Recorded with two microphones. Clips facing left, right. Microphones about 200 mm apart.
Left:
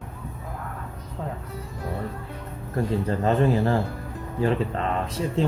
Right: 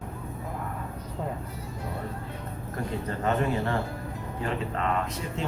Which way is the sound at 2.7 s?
30° left (ahead or behind).